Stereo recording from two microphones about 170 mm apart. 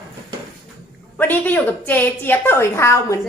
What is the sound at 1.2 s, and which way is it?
A woman's voice, 10° left (ahead or behind).